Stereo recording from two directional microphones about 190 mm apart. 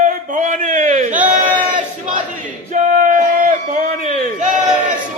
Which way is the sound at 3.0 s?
40° right (ahead or behind).